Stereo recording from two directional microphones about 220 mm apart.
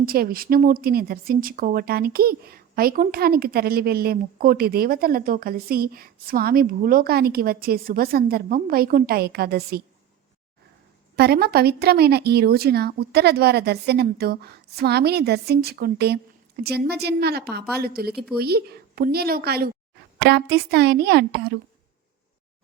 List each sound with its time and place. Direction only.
0.0 s a woman's voice: 45° right (ahead or behind)
11.2 s a woman's voice: 45° right (ahead or behind)